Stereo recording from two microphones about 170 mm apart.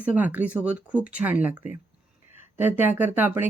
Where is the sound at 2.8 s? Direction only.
10° right (ahead or behind).